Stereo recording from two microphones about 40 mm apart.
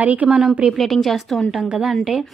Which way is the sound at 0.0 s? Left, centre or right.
Right.